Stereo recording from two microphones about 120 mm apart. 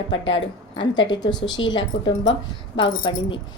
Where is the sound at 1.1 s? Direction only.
35° left (ahead or behind).